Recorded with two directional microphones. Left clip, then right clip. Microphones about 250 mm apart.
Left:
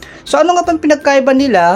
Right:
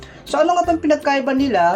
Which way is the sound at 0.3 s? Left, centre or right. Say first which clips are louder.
Left 5 dB; left.